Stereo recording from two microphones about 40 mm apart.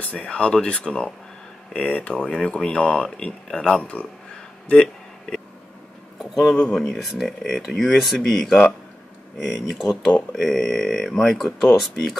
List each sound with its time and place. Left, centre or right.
0.0 s speech: left
3.8 s speech: left
6.1 s a sound: centre
6.7 s speech: centre
9.4 s speech: centre
10.3 s speech: centre